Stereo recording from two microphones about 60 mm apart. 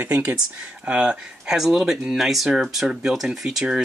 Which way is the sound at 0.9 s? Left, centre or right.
Centre.